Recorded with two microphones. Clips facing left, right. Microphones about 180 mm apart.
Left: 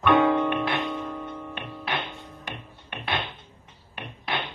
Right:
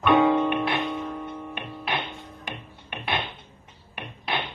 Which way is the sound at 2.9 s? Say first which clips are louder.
Right 1 dB; 20° right (ahead or behind).